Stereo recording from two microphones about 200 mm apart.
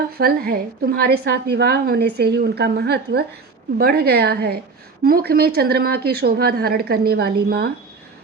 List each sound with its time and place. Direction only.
0.2 s a woman's voice: 50° right (ahead or behind)